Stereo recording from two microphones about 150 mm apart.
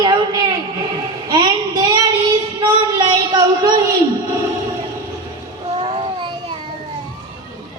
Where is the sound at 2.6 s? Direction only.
25° right (ahead or behind).